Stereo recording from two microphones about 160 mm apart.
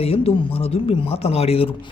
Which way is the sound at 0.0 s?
40° left (ahead or behind).